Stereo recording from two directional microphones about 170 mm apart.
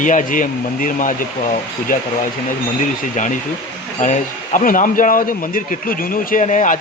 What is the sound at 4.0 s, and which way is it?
Speech, 50° left (ahead or behind).